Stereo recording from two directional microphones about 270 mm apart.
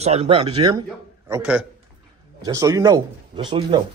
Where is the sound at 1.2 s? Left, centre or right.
Centre.